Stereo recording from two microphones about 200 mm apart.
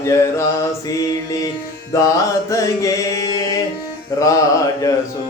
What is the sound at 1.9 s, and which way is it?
Music, 15° left (ahead or behind).